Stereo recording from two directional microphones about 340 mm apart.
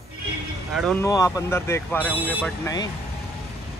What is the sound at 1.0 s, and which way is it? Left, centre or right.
Speech, centre.